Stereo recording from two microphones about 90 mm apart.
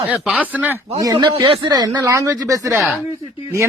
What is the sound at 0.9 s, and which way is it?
Speech, 45° right (ahead or behind).